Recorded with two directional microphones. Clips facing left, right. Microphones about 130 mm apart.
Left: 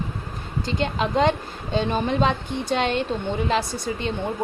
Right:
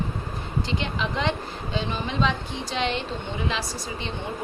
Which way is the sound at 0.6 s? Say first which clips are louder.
Left 6 dB; 45° left (ahead or behind).